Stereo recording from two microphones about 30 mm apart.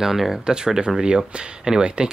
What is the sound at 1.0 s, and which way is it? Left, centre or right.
Speech, right.